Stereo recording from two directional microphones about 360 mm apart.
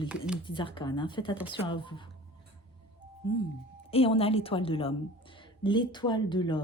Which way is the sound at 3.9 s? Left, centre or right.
Centre.